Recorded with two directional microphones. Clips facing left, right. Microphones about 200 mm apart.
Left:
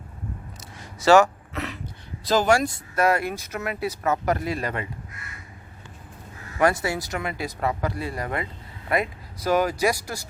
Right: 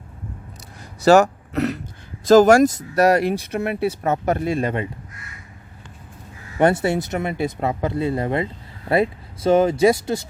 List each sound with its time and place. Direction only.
1.0 s speech: 40° right (ahead or behind)
6.6 s speech: 25° right (ahead or behind)